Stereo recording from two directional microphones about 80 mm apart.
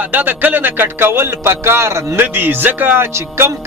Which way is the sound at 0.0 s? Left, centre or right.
Right.